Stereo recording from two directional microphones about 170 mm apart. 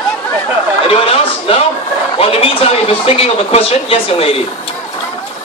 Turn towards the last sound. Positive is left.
turn(degrees=35)  # may be behind; listen again after turning